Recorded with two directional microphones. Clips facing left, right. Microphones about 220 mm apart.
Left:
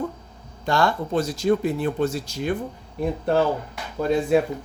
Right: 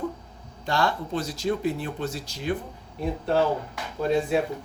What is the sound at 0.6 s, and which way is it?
Speech, 45° left (ahead or behind).